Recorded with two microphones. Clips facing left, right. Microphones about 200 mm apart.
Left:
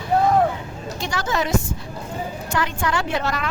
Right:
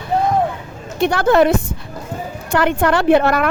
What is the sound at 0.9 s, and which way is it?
A woman's voice, 60° right (ahead or behind).